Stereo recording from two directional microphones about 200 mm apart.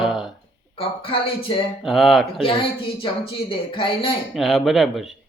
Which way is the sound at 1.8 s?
Centre (ahead or behind).